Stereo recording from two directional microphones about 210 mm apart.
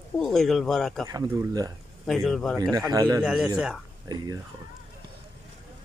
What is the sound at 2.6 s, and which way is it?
Speech, 15° right (ahead or behind).